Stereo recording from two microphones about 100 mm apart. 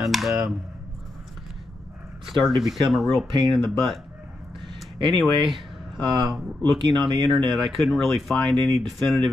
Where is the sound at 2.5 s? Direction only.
Centre (ahead or behind).